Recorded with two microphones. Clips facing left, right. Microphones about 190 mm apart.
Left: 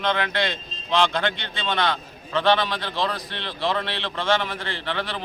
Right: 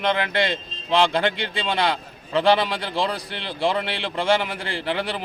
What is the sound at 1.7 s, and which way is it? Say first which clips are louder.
A man's voice: even; 30° right (ahead or behind).